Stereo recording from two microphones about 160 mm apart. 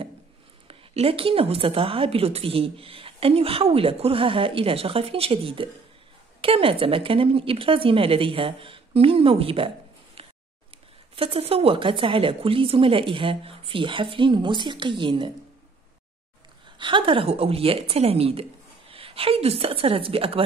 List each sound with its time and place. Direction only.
0.7 s speech: 35° right (ahead or behind)
11.1 s speech: 35° right (ahead or behind)
16.7 s speech: 30° right (ahead or behind)